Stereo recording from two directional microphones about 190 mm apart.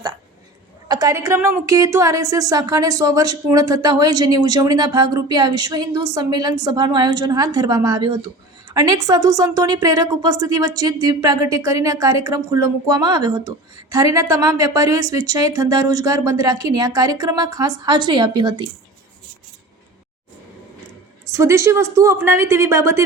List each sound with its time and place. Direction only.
0.9 s a woman's voice: 20° right (ahead or behind)
21.3 s speech: 15° right (ahead or behind)